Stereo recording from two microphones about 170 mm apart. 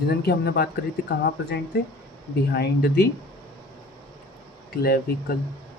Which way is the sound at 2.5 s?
70° left (ahead or behind).